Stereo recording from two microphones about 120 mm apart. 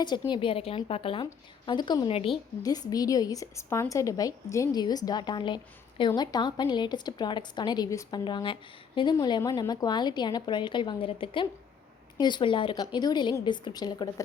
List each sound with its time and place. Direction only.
0.0 s a woman's voice: 40° left (ahead or behind)
2.0 s a woman's voice: 50° left (ahead or behind)
2.6 s a woman's voice: 35° left (ahead or behind)
8.2 s a woman's voice: 40° left (ahead or behind)